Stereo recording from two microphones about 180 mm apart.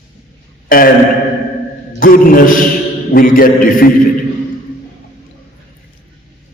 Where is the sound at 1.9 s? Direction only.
50° left (ahead or behind).